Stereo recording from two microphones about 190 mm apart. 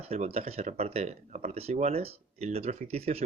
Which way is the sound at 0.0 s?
35° right (ahead or behind).